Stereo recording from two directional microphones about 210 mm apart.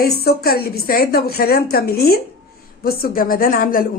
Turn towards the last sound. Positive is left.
turn(degrees=40)  # may be behind; listen again after turning